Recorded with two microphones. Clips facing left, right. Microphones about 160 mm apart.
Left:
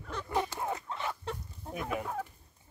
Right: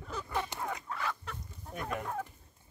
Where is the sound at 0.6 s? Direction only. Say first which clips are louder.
Left 2 dB; 25° left (ahead or behind).